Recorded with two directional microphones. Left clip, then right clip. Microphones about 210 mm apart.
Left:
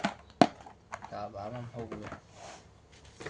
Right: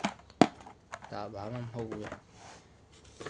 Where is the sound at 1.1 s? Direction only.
55° right (ahead or behind).